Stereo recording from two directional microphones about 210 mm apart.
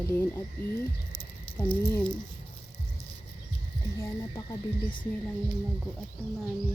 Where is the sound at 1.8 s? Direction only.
10° left (ahead or behind).